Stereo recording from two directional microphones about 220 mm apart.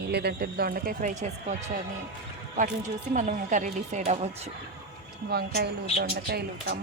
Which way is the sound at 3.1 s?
35° right (ahead or behind).